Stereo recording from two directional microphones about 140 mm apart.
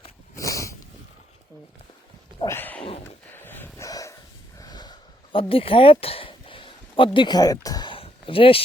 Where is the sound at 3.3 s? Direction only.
15° left (ahead or behind).